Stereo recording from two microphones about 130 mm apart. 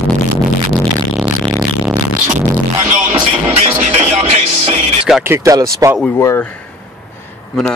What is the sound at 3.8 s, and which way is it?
Music, 60° right (ahead or behind).